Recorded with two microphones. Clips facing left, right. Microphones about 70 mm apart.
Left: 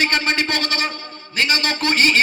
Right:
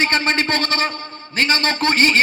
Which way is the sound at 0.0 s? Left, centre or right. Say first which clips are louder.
Right 1 dB; right.